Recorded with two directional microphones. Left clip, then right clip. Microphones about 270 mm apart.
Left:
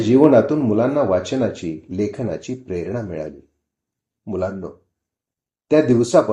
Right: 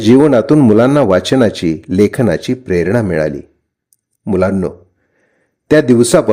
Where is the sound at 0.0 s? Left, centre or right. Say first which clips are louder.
Right 4 dB; right.